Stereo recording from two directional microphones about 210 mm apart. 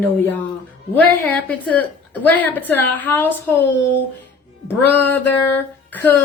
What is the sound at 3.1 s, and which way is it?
Speech, 10° left (ahead or behind).